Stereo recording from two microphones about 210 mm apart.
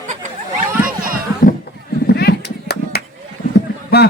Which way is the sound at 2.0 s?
50° left (ahead or behind).